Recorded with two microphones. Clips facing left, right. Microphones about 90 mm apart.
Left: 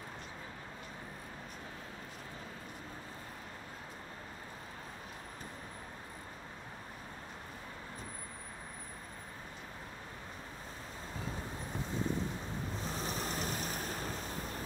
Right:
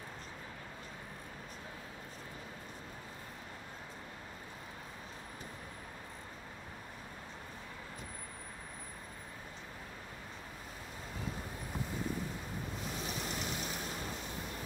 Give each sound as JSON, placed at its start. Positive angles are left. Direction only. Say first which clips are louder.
{"t": 12.8, "sound": "vehicle", "louder": "left 2 dB", "side_deg": 35}